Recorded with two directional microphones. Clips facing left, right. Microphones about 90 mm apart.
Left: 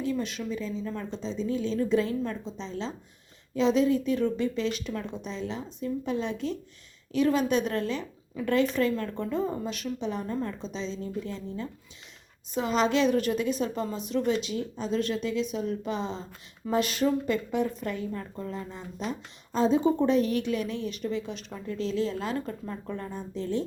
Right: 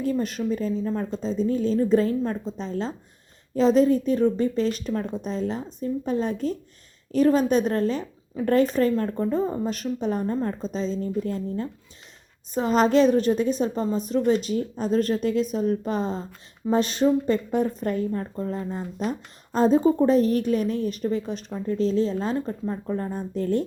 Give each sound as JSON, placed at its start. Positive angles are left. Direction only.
{"t": 0.0, "sound": "a woman's voice", "side_deg": -45}
{"t": 16.6, "sound": "a woman's voice", "side_deg": -35}